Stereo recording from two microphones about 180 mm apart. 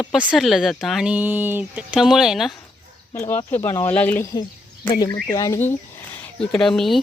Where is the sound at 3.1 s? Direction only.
15° left (ahead or behind).